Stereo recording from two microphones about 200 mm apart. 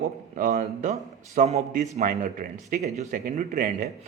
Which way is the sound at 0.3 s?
40° right (ahead or behind).